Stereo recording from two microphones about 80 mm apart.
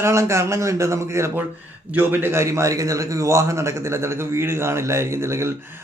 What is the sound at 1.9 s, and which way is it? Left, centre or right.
Speech, right.